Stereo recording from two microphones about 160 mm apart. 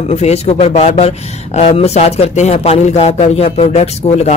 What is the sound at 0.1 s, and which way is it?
Speech, 45° left (ahead or behind).